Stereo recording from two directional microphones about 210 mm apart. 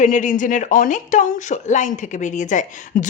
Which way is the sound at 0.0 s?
35° left (ahead or behind).